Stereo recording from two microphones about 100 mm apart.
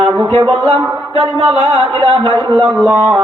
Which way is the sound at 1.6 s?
70° right (ahead or behind).